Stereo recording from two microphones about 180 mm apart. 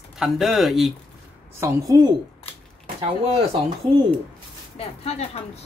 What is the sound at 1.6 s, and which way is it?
Speech, 20° right (ahead or behind).